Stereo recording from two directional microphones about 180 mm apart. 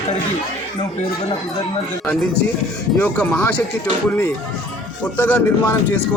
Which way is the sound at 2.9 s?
5° left (ahead or behind).